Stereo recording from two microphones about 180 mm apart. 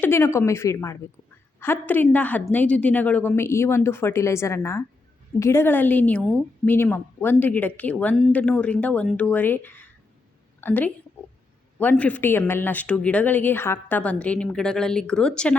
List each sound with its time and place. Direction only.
0.0 s a woman's voice: 15° left (ahead or behind)